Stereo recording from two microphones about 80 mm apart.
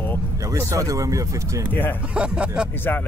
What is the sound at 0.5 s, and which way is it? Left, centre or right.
Speech, right.